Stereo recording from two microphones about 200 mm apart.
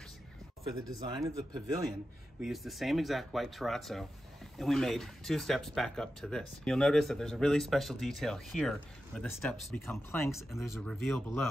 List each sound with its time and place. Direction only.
0.7 s speech: 15° right (ahead or behind)
2.4 s speech: centre (ahead or behind)